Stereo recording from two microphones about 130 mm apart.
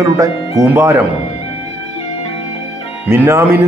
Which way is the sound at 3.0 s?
15° right (ahead or behind).